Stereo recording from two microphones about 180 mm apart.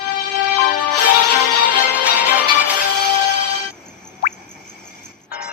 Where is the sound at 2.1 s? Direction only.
10° right (ahead or behind).